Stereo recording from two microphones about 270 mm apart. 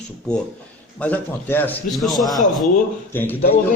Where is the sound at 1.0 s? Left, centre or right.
Centre.